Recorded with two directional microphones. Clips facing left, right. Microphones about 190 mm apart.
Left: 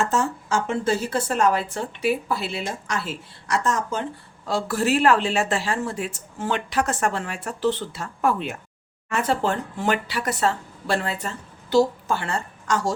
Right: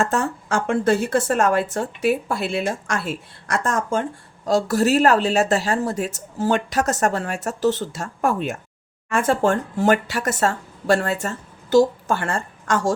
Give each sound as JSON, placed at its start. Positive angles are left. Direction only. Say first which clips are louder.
{"t": 0.1, "sound": "a woman's voice", "louder": "right 1 dB", "side_deg": -55}